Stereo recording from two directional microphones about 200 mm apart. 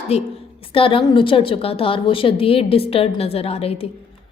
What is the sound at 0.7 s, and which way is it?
A woman's voice, 25° left (ahead or behind).